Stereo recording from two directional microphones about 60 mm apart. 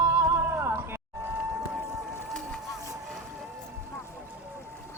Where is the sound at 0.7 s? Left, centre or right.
Right.